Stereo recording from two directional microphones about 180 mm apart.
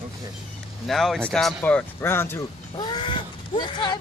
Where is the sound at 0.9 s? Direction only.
Centre (ahead or behind).